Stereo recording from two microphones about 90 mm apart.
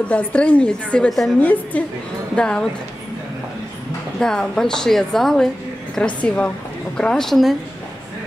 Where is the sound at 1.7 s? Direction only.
15° left (ahead or behind).